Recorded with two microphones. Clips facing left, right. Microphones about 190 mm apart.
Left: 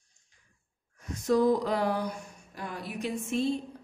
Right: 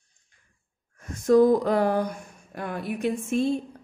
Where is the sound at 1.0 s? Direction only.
50° right (ahead or behind).